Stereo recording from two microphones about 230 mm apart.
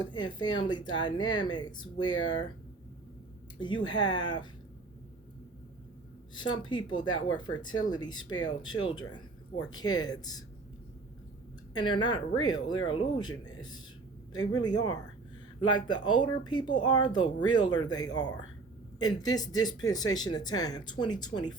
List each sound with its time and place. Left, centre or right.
0.0 s speech: centre
3.6 s speech: centre
6.3 s speech: centre
11.7 s speech: centre
14.3 s speech: centre